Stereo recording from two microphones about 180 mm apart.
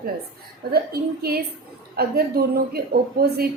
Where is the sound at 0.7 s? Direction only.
60° right (ahead or behind).